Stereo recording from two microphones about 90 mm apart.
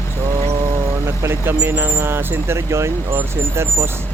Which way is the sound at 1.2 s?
25° right (ahead or behind).